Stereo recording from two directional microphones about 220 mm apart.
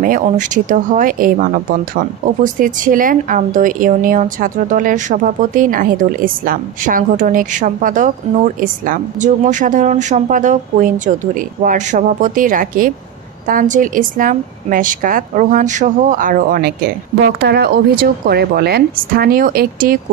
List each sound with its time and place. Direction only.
0.0 s a woman's voice: 40° right (ahead or behind)